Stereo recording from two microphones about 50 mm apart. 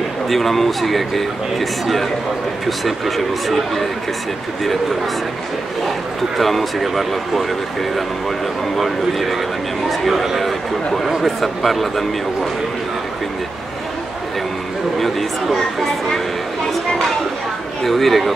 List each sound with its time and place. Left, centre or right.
0.3 s speech: centre
6.3 s speech: centre
8.7 s speech: centre
15.0 s speech: centre
17.8 s speech: centre